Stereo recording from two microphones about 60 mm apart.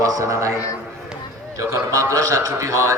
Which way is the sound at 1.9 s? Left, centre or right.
Right.